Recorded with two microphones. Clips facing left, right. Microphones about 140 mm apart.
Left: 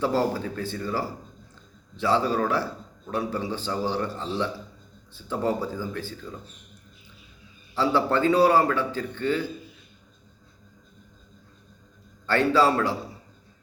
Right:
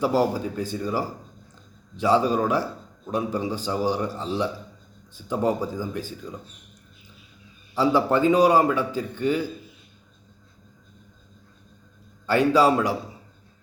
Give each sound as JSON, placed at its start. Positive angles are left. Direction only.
{"t": 0.0, "sound": "a man's voice", "side_deg": -15}
{"t": 7.8, "sound": "a man's voice", "side_deg": -15}
{"t": 12.2, "sound": "a man's voice", "side_deg": -15}